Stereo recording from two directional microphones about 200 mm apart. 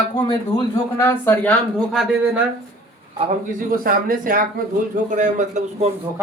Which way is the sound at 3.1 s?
40° right (ahead or behind).